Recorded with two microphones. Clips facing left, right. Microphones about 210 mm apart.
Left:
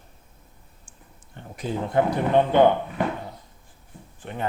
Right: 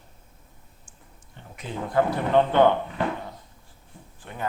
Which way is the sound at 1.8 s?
20° left (ahead or behind).